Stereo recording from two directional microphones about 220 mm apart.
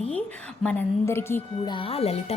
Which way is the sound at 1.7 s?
25° left (ahead or behind).